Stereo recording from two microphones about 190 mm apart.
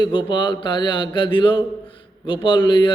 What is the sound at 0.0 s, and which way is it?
A man's voice, 25° left (ahead or behind).